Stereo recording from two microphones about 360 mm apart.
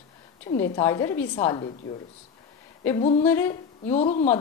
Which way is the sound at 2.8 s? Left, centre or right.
Centre.